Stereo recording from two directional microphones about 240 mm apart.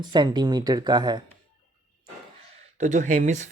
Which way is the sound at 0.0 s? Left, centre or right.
Centre.